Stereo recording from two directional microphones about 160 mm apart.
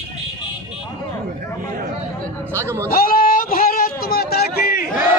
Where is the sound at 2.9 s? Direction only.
65° left (ahead or behind).